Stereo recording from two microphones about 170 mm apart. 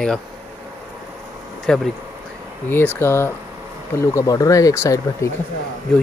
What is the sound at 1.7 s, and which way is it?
Speech, 5° left (ahead or behind).